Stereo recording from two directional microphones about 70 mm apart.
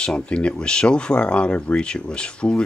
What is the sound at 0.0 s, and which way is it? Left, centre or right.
Speech, centre.